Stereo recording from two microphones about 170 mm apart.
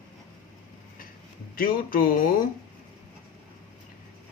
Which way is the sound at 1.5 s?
55° left (ahead or behind).